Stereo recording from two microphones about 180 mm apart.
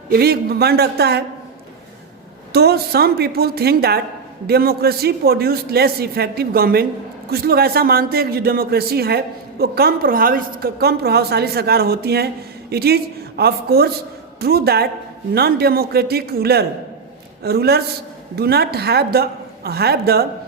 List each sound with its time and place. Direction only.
0.1 s a man's voice: 60° right (ahead or behind)
2.5 s a man's voice: 60° right (ahead or behind)